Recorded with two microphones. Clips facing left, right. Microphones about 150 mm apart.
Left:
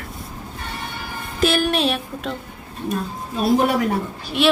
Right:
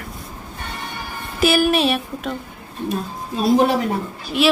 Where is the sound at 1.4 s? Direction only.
5° right (ahead or behind).